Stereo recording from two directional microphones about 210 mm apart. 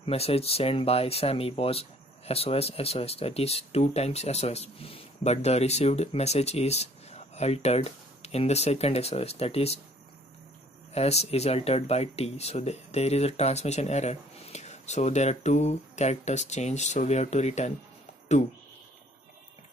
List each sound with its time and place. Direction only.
0.0 s speech: 30° left (ahead or behind)
10.9 s speech: 30° left (ahead or behind)